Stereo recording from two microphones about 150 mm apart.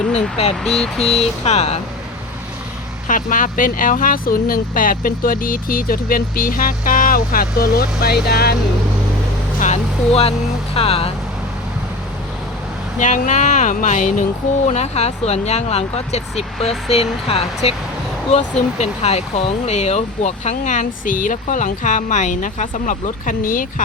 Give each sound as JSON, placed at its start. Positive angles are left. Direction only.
{"t": 0.1, "sound": "speech", "side_deg": 40}
{"t": 0.6, "sound": "speech", "side_deg": 5}
{"t": 1.0, "sound": "speech", "side_deg": 45}
{"t": 3.1, "sound": "speech", "side_deg": 60}
{"t": 9.6, "sound": "speech", "side_deg": 45}
{"t": 13.0, "sound": "speech", "side_deg": 55}